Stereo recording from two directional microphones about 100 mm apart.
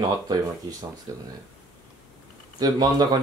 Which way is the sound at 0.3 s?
40° right (ahead or behind).